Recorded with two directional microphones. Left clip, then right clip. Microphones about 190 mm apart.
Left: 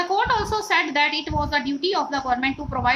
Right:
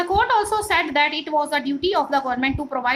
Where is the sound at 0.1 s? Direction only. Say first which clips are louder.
Right 5 dB; 20° right (ahead or behind).